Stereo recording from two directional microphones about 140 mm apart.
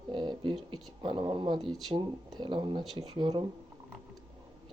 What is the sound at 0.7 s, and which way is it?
Speech, 35° right (ahead or behind).